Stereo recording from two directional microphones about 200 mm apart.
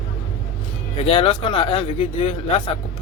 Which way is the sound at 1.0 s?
25° left (ahead or behind).